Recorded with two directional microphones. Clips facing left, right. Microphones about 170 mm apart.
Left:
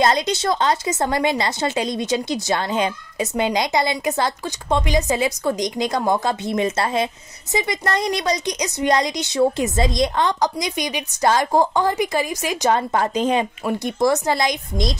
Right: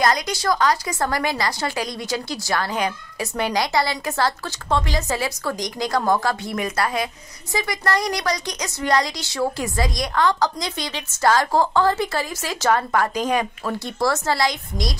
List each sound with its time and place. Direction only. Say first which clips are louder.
0.0 s a woman's voice: left 2 dB; 25° left (ahead or behind)